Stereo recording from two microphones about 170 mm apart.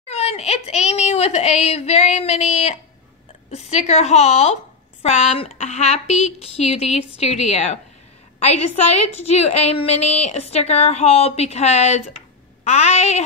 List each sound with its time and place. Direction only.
0.1 s a woman's voice: 40° left (ahead or behind)